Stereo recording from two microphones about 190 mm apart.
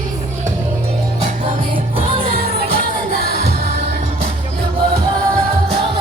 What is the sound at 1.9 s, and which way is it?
Music, 30° right (ahead or behind).